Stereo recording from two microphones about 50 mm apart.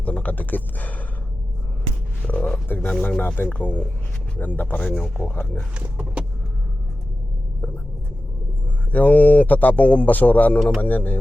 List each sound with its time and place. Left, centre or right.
0.0 s a sound: left
2.2 s frog: left
2.6 s speech: left
8.9 s speech: left